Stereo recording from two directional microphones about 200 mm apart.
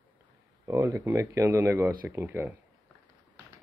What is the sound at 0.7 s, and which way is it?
Speech, 15° right (ahead or behind).